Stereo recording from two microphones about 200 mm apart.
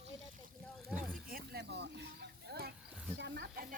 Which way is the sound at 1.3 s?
50° right (ahead or behind).